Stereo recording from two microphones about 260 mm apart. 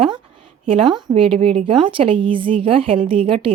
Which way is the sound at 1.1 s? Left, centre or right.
Right.